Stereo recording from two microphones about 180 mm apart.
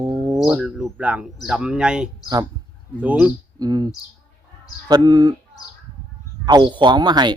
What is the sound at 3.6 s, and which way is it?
Speech, 20° right (ahead or behind).